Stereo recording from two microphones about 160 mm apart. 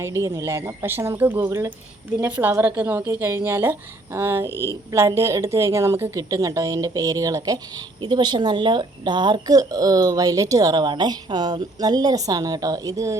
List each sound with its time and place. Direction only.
0.0 s a woman's voice: 15° right (ahead or behind)
4.4 s a woman's voice: 15° left (ahead or behind)
4.9 s speech: 20° right (ahead or behind)